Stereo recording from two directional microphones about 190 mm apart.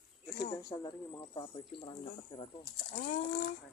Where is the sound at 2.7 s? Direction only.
50° left (ahead or behind).